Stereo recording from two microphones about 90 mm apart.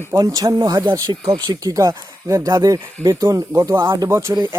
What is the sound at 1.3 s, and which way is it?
Speech, 60° right (ahead or behind).